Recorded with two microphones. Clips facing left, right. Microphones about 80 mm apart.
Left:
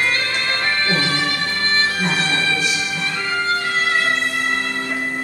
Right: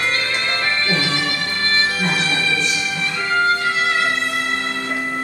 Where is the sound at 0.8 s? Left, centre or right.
Left.